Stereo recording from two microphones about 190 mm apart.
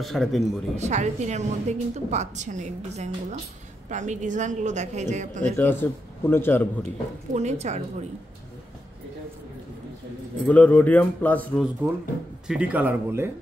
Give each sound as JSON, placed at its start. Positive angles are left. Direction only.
{"t": 0.0, "sound": "speech", "side_deg": 0}
{"t": 0.7, "sound": "a woman's voice", "side_deg": -40}
{"t": 5.4, "sound": "a man's voice", "side_deg": 10}
{"t": 7.3, "sound": "a woman's voice", "side_deg": -35}
{"t": 10.4, "sound": "a man's voice", "side_deg": 5}
{"t": 11.8, "sound": "speech", "side_deg": -10}